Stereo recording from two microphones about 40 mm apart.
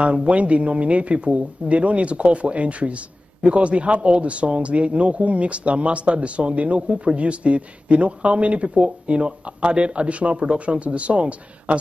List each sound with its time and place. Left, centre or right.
0.0 s speech: right